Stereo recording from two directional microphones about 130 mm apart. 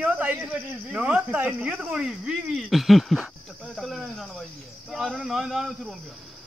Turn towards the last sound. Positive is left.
turn(degrees=-5)  # may be behind; listen again after turning